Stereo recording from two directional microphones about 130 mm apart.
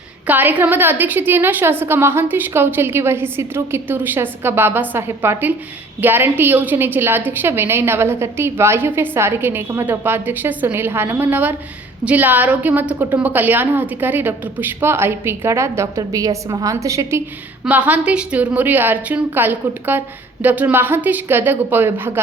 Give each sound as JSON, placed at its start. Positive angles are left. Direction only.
{"t": 0.3, "sound": "a woman's voice", "side_deg": -15}
{"t": 17.7, "sound": "a woman's voice", "side_deg": -10}